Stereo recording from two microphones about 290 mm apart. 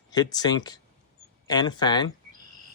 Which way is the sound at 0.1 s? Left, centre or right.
Centre.